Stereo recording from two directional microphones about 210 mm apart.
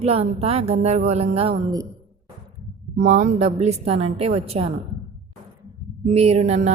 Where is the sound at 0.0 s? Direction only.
30° right (ahead or behind).